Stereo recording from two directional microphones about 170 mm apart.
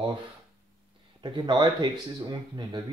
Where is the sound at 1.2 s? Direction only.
25° right (ahead or behind).